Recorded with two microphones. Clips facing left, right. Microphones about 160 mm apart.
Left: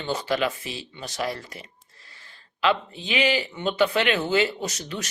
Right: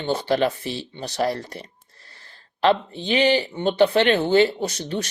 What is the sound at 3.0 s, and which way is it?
Speech, 35° right (ahead or behind).